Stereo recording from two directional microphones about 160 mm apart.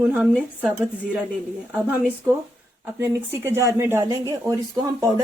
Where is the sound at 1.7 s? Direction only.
10° right (ahead or behind).